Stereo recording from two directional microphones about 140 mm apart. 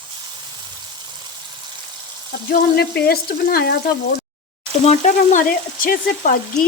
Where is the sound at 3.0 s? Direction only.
90° left.